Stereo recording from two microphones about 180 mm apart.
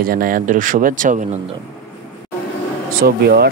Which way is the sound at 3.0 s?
60° right (ahead or behind).